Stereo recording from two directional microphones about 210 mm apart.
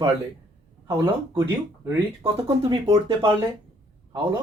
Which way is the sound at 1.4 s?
15° right (ahead or behind).